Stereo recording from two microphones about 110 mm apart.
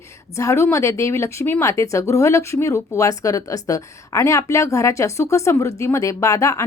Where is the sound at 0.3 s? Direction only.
25° left (ahead or behind).